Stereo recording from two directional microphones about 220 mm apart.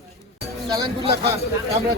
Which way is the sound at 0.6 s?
20° right (ahead or behind).